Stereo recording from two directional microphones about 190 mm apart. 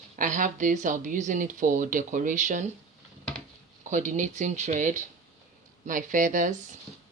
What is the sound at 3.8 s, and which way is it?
Speech, 40° right (ahead or behind).